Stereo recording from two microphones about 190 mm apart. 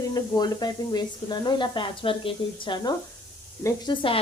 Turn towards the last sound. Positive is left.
turn(degrees=15)  # may be behind; listen again after turning